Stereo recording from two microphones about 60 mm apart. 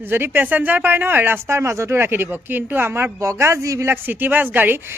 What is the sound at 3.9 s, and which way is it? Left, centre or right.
Speech, right.